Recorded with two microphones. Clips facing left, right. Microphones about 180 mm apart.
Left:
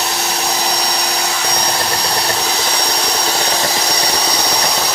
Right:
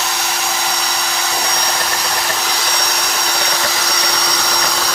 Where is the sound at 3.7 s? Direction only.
30° left (ahead or behind).